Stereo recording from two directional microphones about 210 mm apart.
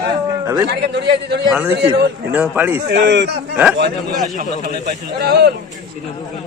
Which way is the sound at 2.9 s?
55° right (ahead or behind).